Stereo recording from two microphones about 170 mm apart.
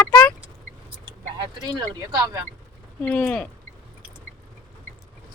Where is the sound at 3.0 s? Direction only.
10° left (ahead or behind).